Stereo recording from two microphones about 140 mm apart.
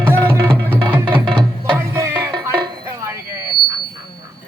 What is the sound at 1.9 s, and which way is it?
Music, 20° right (ahead or behind).